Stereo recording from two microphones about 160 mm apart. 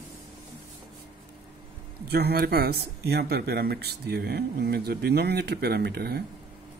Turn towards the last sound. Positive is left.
turn(degrees=-80)